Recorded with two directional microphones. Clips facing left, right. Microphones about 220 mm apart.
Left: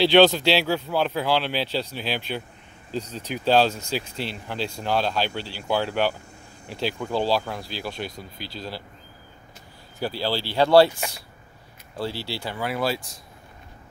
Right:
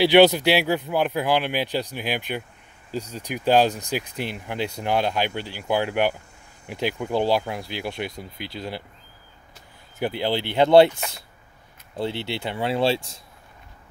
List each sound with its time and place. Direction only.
0.0 s speech: 20° right (ahead or behind)
9.9 s speech: 20° right (ahead or behind)